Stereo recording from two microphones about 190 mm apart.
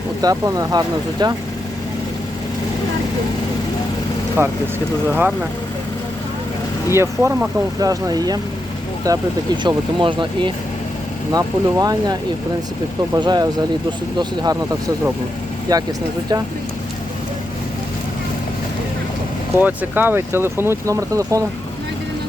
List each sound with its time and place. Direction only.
0.2 s speech: 20° right (ahead or behind)
4.4 s speech: 10° right (ahead or behind)
6.9 s speech: 15° right (ahead or behind)
19.5 s speech: 10° right (ahead or behind)